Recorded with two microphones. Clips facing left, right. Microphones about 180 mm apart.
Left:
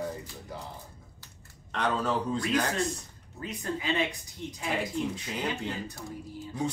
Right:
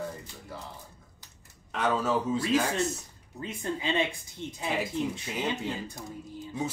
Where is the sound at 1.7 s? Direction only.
5° right (ahead or behind).